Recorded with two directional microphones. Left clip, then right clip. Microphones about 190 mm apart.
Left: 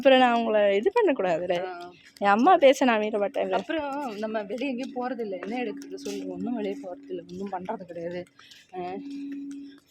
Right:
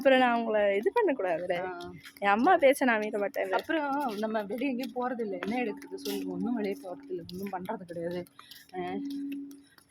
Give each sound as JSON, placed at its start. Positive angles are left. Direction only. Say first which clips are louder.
{"t": 0.0, "sound": "a woman's voice", "louder": "left 5 dB", "side_deg": 30}
{"t": 2.2, "sound": "a woman's voice", "louder": "left 5 dB", "side_deg": 25}
{"t": 3.5, "sound": "speech", "louder": "left 1 dB", "side_deg": -5}
{"t": 8.7, "sound": "a sound", "louder": "left 1 dB", "side_deg": 5}